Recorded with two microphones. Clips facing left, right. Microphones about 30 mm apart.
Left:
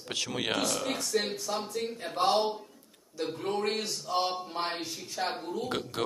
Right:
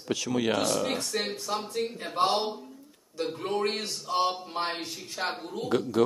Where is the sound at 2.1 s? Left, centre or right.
Right.